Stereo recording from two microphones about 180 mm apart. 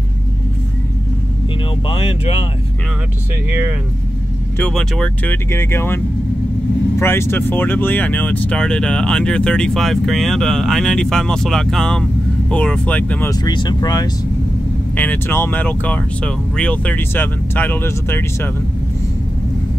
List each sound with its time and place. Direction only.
1.9 s speech: 30° left (ahead or behind)
4.6 s speech: 5° left (ahead or behind)
13.3 s speech: 25° left (ahead or behind)
15.0 s speech: 10° left (ahead or behind)